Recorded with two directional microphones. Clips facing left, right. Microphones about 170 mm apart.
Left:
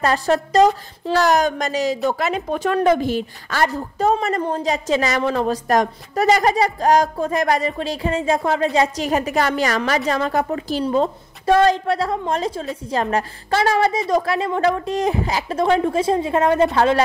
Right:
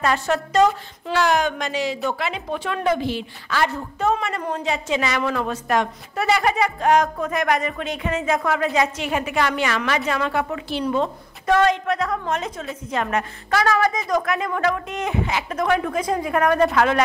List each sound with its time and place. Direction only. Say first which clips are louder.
0.0 s a woman's voice: left 3 dB; 35° left (ahead or behind)